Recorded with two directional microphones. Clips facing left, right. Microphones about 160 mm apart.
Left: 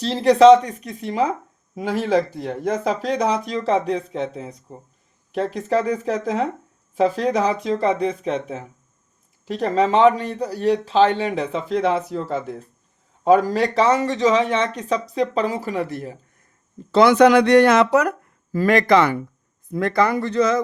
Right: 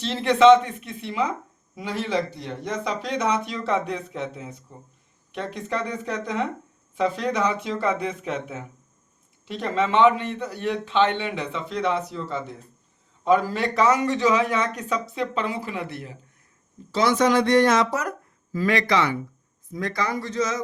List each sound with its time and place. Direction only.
0.0 s a man's voice: 35° left (ahead or behind)
16.9 s speech: 60° left (ahead or behind)
18.5 s speech: 50° left (ahead or behind)